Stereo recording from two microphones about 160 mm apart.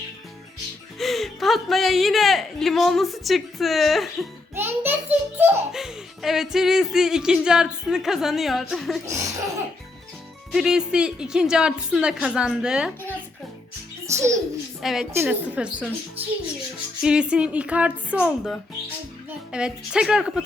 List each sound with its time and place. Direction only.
0.9 s speech: centre (ahead or behind)
4.5 s a sound: 15° right (ahead or behind)
5.7 s speech: 5° right (ahead or behind)
9.0 s laughter: 20° right (ahead or behind)
10.5 s speech: 5° right (ahead or behind)
14.1 s a child's voice: 20° right (ahead or behind)
14.8 s a woman's voice: centre (ahead or behind)
15.1 s speech: 10° right (ahead or behind)